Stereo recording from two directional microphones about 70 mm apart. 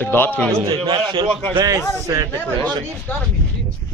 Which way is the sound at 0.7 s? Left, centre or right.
Right.